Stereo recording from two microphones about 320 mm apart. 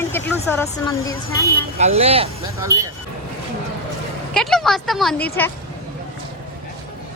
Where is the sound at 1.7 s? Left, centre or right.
Centre.